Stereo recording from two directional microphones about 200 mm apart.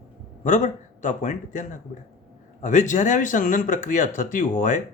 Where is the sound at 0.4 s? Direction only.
40° left (ahead or behind).